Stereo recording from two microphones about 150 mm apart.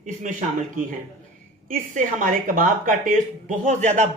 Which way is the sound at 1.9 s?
65° right (ahead or behind).